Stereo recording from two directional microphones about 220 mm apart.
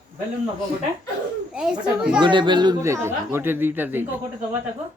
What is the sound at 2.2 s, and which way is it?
A child's voice, 20° right (ahead or behind).